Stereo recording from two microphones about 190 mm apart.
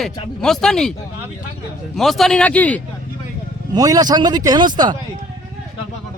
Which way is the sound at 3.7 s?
20° right (ahead or behind).